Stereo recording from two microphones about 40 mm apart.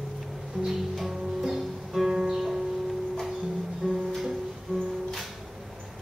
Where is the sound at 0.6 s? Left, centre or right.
Centre.